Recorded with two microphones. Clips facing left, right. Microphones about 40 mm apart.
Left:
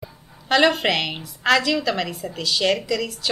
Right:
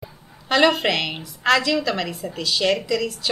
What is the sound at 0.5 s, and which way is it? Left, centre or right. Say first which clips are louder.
Speech: even; centre.